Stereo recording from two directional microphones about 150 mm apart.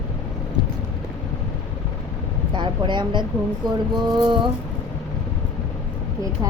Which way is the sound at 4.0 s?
30° right (ahead or behind).